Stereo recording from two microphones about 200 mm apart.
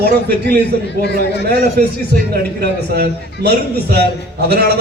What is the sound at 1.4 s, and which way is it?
A man's voice, 50° right (ahead or behind).